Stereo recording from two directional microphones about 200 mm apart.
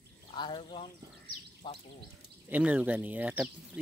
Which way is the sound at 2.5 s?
10° right (ahead or behind).